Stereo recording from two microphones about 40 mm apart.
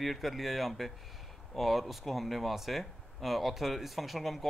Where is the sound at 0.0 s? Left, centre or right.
Centre.